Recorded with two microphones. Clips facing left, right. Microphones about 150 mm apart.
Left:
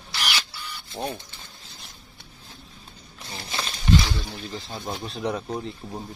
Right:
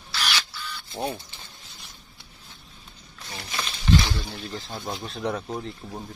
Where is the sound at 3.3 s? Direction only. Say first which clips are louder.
Left 1 dB; 30° left (ahead or behind).